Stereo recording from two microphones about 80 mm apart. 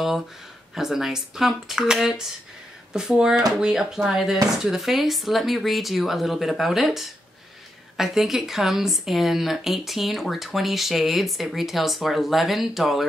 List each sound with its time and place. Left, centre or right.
0.7 s a woman's voice: centre